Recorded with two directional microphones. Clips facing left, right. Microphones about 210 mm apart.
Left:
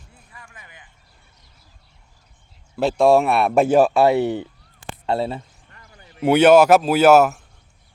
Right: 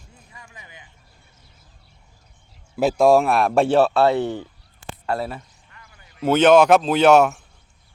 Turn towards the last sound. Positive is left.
turn(degrees=5)  # may be behind; listen again after turning